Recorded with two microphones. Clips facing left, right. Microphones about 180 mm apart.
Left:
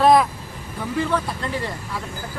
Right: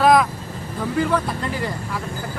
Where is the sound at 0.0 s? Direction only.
Centre (ahead or behind).